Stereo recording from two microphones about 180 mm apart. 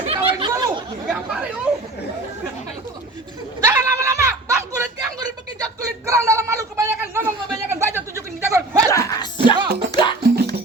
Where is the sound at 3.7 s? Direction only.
15° right (ahead or behind).